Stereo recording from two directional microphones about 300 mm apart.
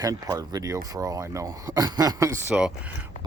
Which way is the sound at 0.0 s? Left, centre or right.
Centre.